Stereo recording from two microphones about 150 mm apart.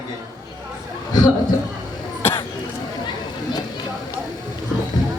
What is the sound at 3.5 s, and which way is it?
Run, 25° left (ahead or behind).